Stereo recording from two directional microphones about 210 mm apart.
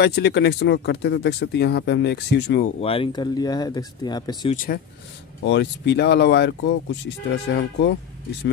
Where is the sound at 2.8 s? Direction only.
25° left (ahead or behind).